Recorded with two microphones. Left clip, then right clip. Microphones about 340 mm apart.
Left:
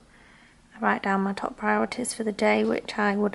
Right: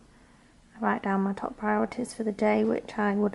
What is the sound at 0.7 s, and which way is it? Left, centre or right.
Speech, centre.